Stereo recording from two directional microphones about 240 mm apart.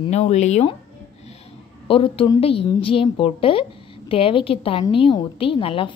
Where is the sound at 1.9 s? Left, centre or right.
Left.